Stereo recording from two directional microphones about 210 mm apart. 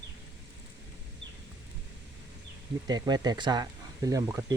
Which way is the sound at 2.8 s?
20° right (ahead or behind).